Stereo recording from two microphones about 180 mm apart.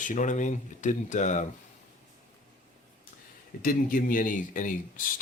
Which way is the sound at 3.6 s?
50° left (ahead or behind).